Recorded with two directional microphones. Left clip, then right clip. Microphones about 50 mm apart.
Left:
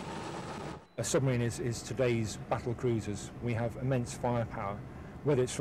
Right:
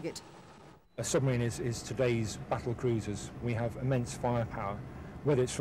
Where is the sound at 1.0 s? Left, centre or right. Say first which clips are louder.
Even; left.